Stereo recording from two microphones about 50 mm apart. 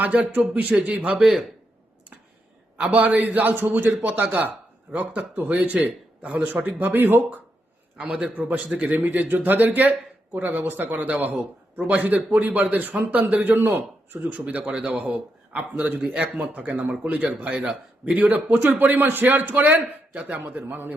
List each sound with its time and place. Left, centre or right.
0.0 s a man's voice: right
2.7 s a man's voice: right
4.3 s a man's voice: right
7.9 s speech: centre
8.4 s a man's voice: right
14.8 s speech: centre
15.5 s a man's voice: right